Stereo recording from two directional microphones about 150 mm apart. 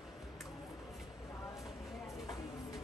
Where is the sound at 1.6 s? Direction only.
Centre (ahead or behind).